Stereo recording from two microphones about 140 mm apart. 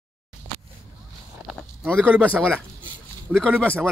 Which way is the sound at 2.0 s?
10° right (ahead or behind).